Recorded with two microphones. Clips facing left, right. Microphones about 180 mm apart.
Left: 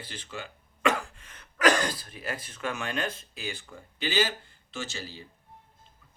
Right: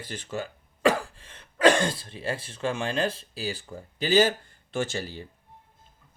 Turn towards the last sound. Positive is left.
turn(degrees=-50)  # may be behind; listen again after turning